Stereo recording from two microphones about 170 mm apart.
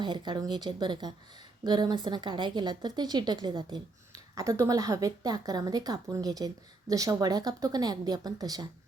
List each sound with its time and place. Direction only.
0.0 s a woman's voice: 25° right (ahead or behind)